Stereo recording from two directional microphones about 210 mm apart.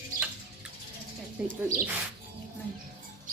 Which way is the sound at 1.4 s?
5° right (ahead or behind).